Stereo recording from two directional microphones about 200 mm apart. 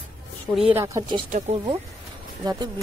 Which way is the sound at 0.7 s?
15° right (ahead or behind).